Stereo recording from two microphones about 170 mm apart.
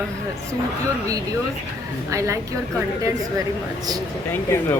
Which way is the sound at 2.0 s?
15° right (ahead or behind).